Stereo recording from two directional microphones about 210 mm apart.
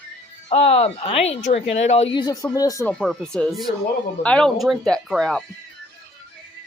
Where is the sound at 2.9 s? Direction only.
Centre (ahead or behind).